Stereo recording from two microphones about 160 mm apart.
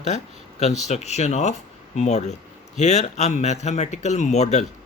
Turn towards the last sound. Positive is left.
turn(degrees=45)  # may be behind; listen again after turning